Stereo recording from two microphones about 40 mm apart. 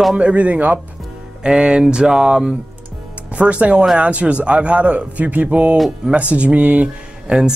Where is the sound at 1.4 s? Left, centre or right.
Right.